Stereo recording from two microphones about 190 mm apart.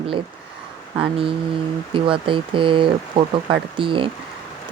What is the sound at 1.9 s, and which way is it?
Speech, 25° right (ahead or behind).